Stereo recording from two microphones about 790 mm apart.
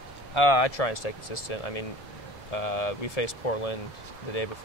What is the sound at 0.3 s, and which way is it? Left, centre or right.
Speech, left.